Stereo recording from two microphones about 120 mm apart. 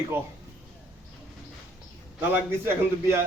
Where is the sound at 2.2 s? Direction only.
20° right (ahead or behind).